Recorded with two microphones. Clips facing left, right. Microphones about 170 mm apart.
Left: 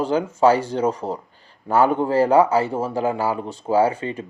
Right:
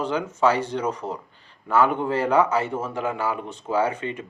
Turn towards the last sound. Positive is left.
turn(degrees=35)  # may be behind; listen again after turning